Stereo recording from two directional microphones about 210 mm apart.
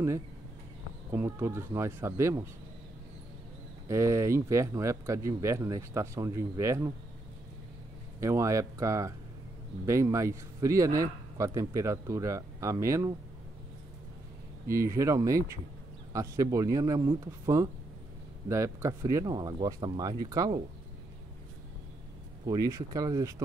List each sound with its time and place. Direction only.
1.1 s a man's voice: 10° right (ahead or behind)
3.9 s a man's voice: 15° right (ahead or behind)
8.2 s a man's voice: 15° right (ahead or behind)
14.7 s a man's voice: 15° right (ahead or behind)
22.5 s a man's voice: 15° right (ahead or behind)